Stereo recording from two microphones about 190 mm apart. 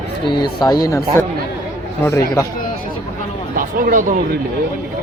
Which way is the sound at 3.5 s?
45° right (ahead or behind).